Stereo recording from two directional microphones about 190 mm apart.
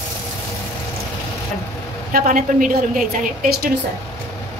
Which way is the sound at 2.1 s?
45° right (ahead or behind).